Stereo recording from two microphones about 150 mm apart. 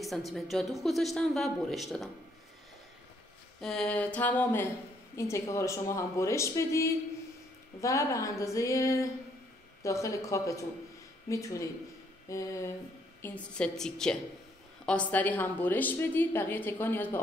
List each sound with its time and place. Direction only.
0.0 s speech: centre (ahead or behind)
3.6 s a woman's voice: 5° left (ahead or behind); by 12.7 s 20° left (ahead or behind)
13.2 s a woman's voice: 10° left (ahead or behind)